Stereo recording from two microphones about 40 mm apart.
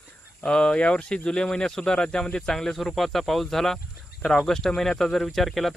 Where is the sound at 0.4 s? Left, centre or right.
Left.